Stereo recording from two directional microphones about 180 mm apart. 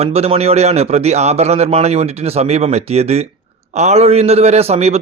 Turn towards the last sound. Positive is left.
turn(degrees=-35)  # may be behind; listen again after turning